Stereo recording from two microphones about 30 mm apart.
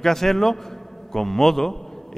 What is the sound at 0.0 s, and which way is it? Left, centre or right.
A man's voice, centre.